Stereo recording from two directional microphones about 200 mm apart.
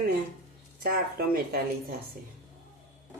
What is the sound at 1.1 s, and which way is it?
Speech, 50° right (ahead or behind).